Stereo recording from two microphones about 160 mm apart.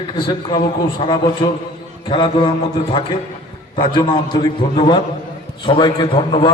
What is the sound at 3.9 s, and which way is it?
A man's voice, 30° left (ahead or behind).